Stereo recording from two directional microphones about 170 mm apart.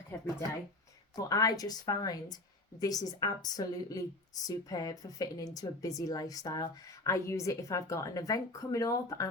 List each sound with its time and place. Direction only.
1.1 s speech: 20° left (ahead or behind)